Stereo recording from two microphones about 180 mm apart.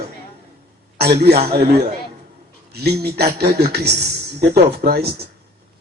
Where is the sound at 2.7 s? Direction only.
60° right (ahead or behind).